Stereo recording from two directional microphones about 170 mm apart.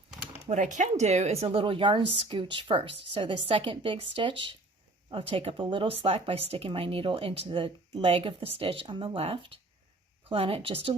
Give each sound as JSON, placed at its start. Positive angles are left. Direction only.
{"t": 0.5, "sound": "speech", "side_deg": -45}